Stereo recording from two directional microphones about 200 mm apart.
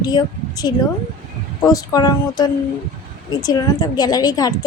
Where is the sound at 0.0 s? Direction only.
20° left (ahead or behind).